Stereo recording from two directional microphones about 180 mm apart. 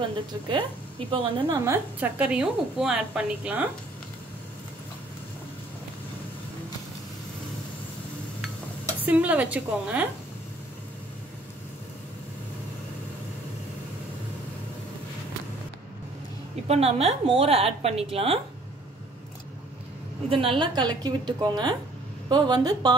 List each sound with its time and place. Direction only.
0.5 s a woman's voice: 30° right (ahead or behind)
1.7 s a woman's voice: 10° right (ahead or behind)
9.0 s a woman's voice: 10° right (ahead or behind)
16.6 s a woman's voice: 35° right (ahead or behind)
20.2 s a woman's voice: 30° right (ahead or behind)